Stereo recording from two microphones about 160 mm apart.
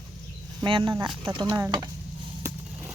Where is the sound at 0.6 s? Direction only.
30° right (ahead or behind).